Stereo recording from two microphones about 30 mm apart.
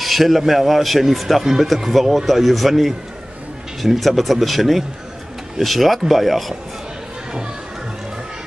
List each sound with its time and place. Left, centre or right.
0.0 s speech: centre
3.8 s speech: centre